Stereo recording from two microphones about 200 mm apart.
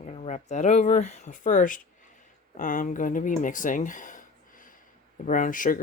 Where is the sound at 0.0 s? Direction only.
35° left (ahead or behind).